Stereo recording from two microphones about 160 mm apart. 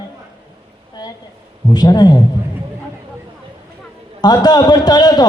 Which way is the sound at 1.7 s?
25° left (ahead or behind).